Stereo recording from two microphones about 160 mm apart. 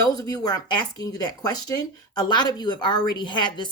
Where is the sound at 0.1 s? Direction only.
25° left (ahead or behind).